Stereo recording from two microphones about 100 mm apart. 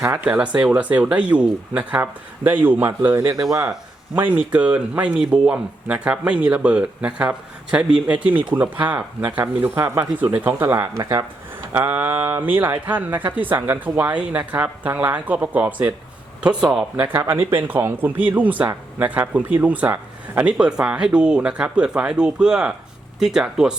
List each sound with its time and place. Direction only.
0.0 s speech: 20° right (ahead or behind)
10.9 s speech: 35° right (ahead or behind)
11.7 s speech: 20° right (ahead or behind)
17.2 s speech: 20° right (ahead or behind)